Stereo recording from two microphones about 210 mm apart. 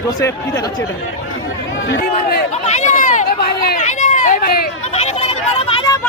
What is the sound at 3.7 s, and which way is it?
Run, 35° left (ahead or behind).